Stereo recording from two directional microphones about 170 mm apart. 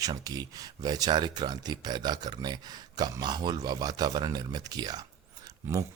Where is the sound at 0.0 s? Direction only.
20° right (ahead or behind).